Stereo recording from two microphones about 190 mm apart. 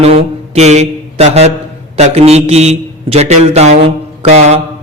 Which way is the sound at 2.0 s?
35° right (ahead or behind).